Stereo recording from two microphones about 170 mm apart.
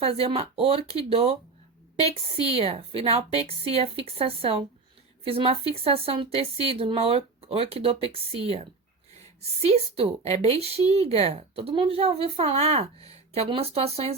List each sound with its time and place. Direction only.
0.0 s a woman's voice: 35° right (ahead or behind)
9.6 s a woman's voice: 35° right (ahead or behind)